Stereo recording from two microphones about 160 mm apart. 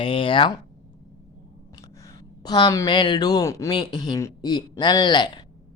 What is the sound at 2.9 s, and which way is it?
Speech, 30° left (ahead or behind).